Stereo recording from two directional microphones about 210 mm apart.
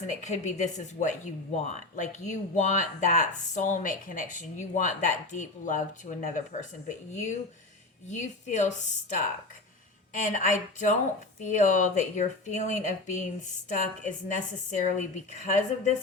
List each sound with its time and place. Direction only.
0.2 s a woman's voice: 35° left (ahead or behind)
8.1 s a woman's voice: 35° left (ahead or behind)